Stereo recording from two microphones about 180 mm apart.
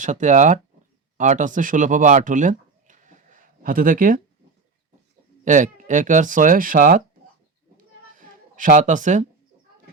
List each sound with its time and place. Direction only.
0.0 s speech: 45° right (ahead or behind)
5.5 s speech: 45° right (ahead or behind)
8.2 s speech: 45° right (ahead or behind)